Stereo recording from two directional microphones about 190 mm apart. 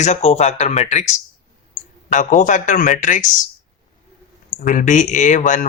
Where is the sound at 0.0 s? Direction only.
35° left (ahead or behind).